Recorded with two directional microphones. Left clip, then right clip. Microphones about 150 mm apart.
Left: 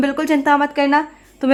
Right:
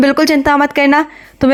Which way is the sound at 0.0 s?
35° right (ahead or behind).